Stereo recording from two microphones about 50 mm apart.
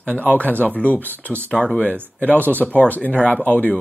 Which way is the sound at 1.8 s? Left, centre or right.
Left.